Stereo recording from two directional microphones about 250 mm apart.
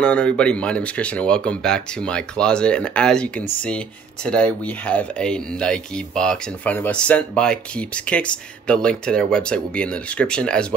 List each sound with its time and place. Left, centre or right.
0.0 s speech: centre